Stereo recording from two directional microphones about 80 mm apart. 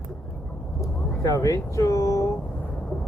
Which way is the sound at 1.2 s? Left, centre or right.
Left.